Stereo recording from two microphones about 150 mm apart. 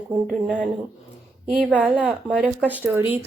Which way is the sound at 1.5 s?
5° right (ahead or behind).